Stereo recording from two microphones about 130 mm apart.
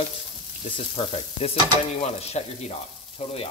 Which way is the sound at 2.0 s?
55° left (ahead or behind).